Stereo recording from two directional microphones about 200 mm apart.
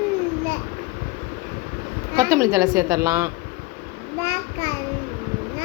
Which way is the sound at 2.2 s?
15° right (ahead or behind).